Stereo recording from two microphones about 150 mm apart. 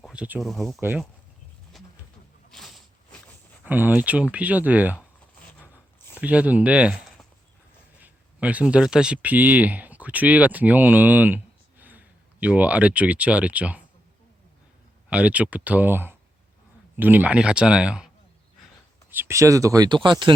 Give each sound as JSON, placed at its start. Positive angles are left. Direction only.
{"t": 0.0, "sound": "speech", "side_deg": -5}
{"t": 0.8, "sound": "speech", "side_deg": -15}
{"t": 1.7, "sound": "pigeon", "side_deg": 0}
{"t": 2.5, "sound": "a sound", "side_deg": 0}
{"t": 3.6, "sound": "speech", "side_deg": -10}
{"t": 6.1, "sound": "speech", "side_deg": -10}
{"t": 15.1, "sound": "speech", "side_deg": -10}
{"t": 19.1, "sound": "speech", "side_deg": -15}